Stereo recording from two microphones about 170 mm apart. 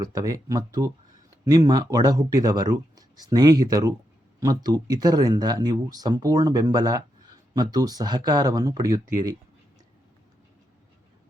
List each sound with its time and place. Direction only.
0.0 s speech: 20° right (ahead or behind)